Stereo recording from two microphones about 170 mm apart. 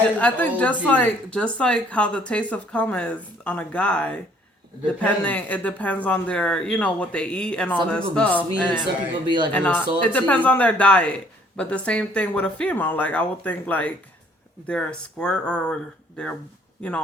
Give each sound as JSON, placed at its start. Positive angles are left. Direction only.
{"t": 0.2, "sound": "a man's voice", "side_deg": 10}
{"t": 8.8, "sound": "a man's voice", "side_deg": -25}
{"t": 9.5, "sound": "a man's voice", "side_deg": 10}